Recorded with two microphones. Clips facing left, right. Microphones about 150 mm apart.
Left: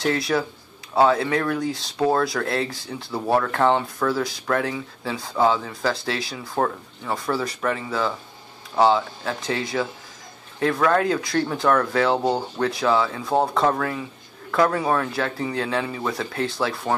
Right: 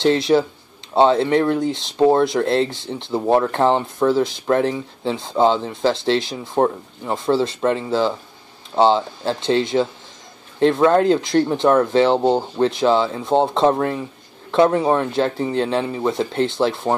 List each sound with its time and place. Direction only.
0.0 s speech: 25° right (ahead or behind)